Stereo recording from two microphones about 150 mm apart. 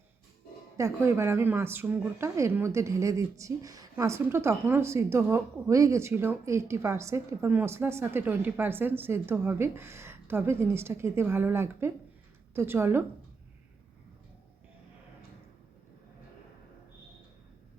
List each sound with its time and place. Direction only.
0.8 s speech: 20° right (ahead or behind)